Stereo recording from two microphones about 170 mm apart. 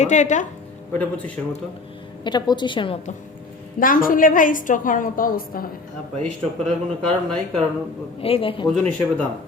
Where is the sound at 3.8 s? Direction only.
55° left (ahead or behind).